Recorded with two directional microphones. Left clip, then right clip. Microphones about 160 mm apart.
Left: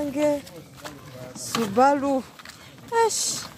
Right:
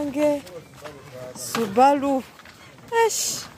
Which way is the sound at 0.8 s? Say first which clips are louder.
Left 1 dB; 90° left.